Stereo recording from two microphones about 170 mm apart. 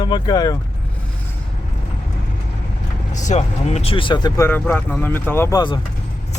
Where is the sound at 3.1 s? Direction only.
45° left (ahead or behind); by 4.4 s 25° left (ahead or behind).